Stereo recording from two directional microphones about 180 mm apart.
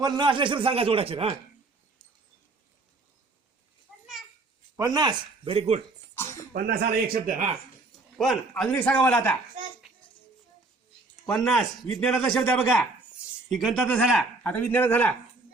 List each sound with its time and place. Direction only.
0.0 s a man's voice: 25° right (ahead or behind)
4.8 s speech: 20° right (ahead or behind)
6.5 s a man's voice: 55° right (ahead or behind)
8.2 s a man's voice: centre (ahead or behind)
9.8 s child singing: 5° right (ahead or behind)
11.3 s a man's voice: 5° left (ahead or behind)